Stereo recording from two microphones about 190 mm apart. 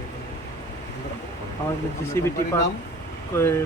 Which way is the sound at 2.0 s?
15° left (ahead or behind).